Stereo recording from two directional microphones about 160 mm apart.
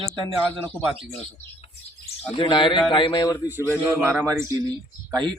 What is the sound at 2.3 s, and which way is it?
Speech, 30° left (ahead or behind).